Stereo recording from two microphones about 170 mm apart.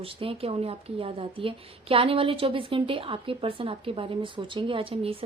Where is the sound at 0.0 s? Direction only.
30° right (ahead or behind).